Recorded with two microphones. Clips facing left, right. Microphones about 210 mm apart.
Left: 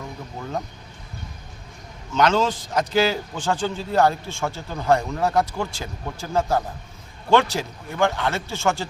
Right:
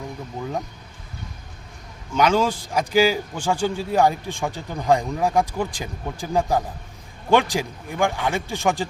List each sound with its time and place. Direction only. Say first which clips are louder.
2.1 s a man's voice: right 1 dB; 10° right (ahead or behind)